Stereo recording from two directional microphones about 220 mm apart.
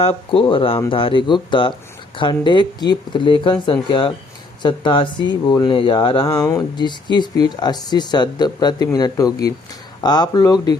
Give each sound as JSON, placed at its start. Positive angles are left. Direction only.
{"t": 0.0, "sound": "speech", "side_deg": 25}